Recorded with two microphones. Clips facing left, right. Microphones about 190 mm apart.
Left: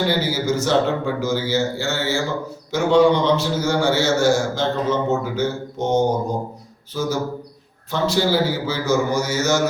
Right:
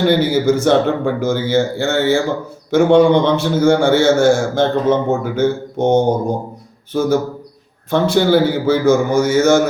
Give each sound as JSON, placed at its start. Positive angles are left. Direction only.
{"t": 0.1, "sound": "a man's voice", "side_deg": -55}